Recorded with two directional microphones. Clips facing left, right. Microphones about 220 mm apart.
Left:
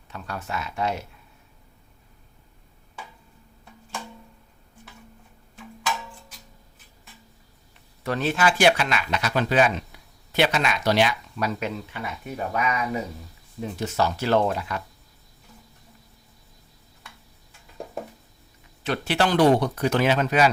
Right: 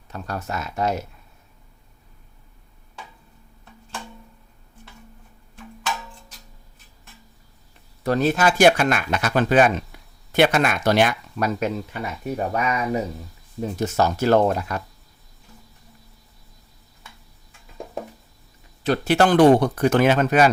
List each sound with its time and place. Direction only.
0.1 s speech: 40° right (ahead or behind)
8.0 s speech: 40° right (ahead or behind)
18.8 s speech: 40° right (ahead or behind)